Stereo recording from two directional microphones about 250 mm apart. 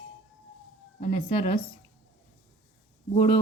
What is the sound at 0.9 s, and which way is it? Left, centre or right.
Speech, left.